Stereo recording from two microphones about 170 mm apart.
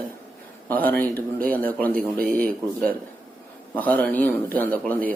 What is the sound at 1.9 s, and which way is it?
Speech, 55° right (ahead or behind).